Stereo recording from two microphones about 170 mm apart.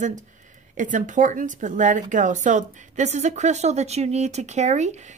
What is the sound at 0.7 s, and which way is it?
A woman's voice, 50° right (ahead or behind).